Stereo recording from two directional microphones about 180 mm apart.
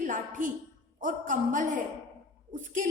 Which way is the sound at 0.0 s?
45° right (ahead or behind).